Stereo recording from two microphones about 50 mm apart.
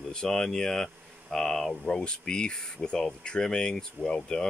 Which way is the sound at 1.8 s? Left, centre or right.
Centre.